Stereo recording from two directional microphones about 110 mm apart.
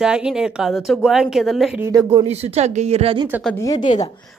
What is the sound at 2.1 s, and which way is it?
Speech, 70° right (ahead or behind).